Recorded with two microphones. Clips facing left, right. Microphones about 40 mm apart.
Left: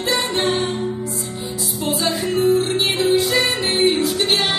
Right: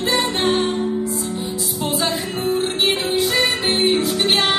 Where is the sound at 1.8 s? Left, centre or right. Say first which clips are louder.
Left 1 dB; centre.